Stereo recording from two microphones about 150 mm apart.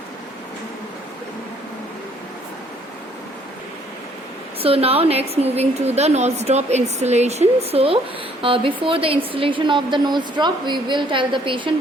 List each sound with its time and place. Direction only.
4.6 s a woman's voice: 40° right (ahead or behind)